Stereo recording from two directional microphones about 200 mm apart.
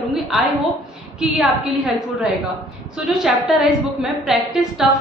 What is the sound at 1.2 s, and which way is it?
Speech, centre (ahead or behind).